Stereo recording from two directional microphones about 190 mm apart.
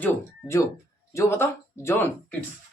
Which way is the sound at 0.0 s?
15° left (ahead or behind).